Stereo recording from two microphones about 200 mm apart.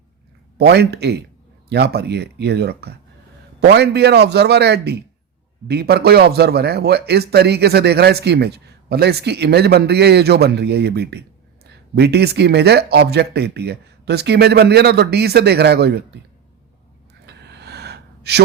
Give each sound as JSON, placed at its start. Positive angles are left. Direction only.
{"t": 0.5, "sound": "speech", "side_deg": -55}
{"t": 17.2, "sound": "gasp", "side_deg": -55}